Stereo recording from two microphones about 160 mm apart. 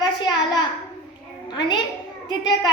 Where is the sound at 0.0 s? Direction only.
25° left (ahead or behind).